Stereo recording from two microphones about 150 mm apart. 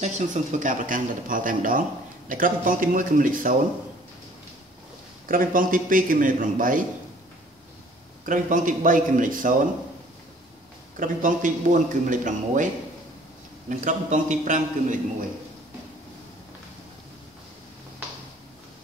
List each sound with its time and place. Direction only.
0.0 s speech: 50° right (ahead or behind)
5.3 s speech: 65° right (ahead or behind)
8.3 s speech: 60° right (ahead or behind)
11.0 s speech: 60° right (ahead or behind)
13.7 s speech: 55° right (ahead or behind)